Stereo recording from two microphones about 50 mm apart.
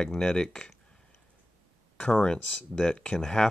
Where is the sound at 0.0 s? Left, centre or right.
Centre.